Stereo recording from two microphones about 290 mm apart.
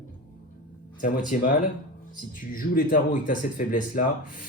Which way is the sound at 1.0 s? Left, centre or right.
Left.